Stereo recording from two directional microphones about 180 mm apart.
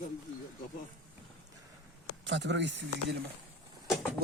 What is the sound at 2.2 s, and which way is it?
Speech, 85° right.